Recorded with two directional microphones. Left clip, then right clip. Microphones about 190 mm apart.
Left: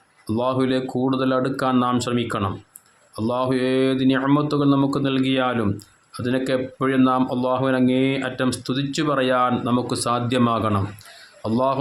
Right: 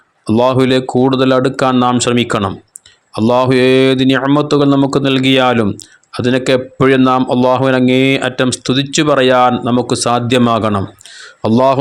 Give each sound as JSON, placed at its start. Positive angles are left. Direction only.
{"t": 0.3, "sound": "speech", "side_deg": -35}